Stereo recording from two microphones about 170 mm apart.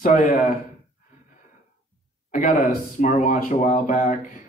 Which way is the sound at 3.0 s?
50° left (ahead or behind).